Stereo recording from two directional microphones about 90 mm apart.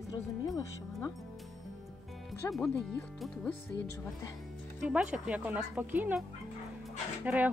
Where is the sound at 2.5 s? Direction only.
5° left (ahead or behind).